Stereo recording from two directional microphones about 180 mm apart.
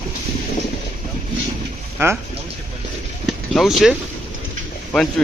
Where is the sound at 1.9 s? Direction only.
10° right (ahead or behind).